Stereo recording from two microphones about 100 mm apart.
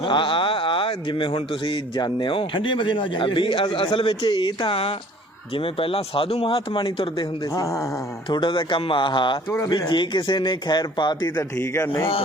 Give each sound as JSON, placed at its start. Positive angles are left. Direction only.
{"t": 0.0, "sound": "speech", "side_deg": 55}
{"t": 7.5, "sound": "speech", "side_deg": 35}
{"t": 8.3, "sound": "speech", "side_deg": 50}
{"t": 11.6, "sound": "speech", "side_deg": 25}